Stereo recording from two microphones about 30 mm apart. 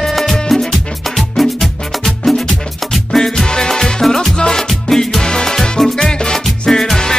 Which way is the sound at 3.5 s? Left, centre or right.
Centre.